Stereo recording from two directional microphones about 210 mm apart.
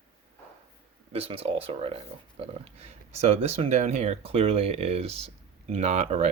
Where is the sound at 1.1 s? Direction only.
30° right (ahead or behind).